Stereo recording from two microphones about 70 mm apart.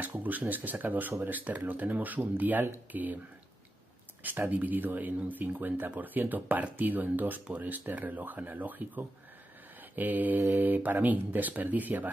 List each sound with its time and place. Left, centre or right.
0.0 s speech: right
4.2 s speech: right